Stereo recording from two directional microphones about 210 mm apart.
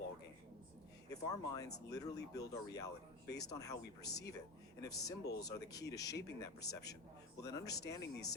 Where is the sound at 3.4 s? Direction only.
15° left (ahead or behind).